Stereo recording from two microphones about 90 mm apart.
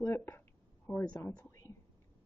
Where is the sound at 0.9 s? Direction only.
20° left (ahead or behind).